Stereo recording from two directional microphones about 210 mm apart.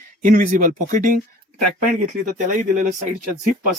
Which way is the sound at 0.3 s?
40° right (ahead or behind).